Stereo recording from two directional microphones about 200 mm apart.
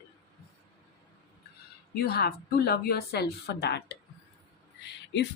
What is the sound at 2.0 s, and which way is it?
A woman's voice, 50° left (ahead or behind).